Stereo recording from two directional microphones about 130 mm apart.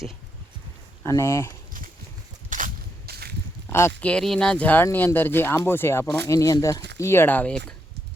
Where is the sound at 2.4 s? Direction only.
85° right.